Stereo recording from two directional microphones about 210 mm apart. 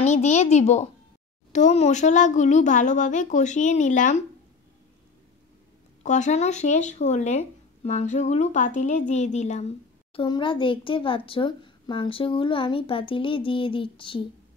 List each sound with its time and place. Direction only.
0.0 s a child's voice: 35° left (ahead or behind)
6.0 s speech: 35° left (ahead or behind)